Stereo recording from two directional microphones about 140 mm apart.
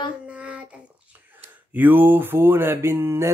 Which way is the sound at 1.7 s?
15° right (ahead or behind).